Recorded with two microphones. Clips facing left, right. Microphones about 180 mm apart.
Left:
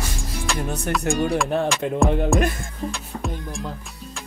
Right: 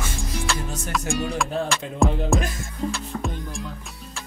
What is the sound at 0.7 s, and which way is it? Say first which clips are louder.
Music: left 6 dB; 60° left (ahead or behind).